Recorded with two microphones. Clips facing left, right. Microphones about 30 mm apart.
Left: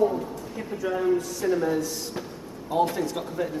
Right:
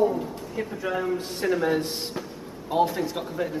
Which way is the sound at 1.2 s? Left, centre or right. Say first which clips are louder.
Even; right.